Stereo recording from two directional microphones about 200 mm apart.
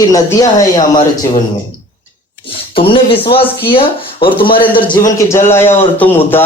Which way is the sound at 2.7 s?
25° left (ahead or behind).